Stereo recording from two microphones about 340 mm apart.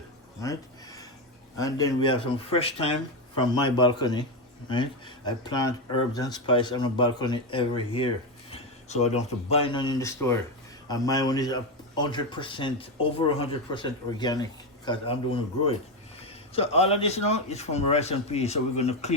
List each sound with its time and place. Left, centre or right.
0.4 s a sound: centre
1.5 s speech: centre
16.2 s a man's voice: centre